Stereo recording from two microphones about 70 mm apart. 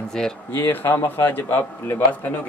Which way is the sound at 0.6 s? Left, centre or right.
Left.